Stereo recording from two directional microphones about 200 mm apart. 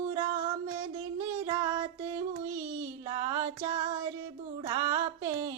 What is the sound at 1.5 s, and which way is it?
Child singing, 15° right (ahead or behind).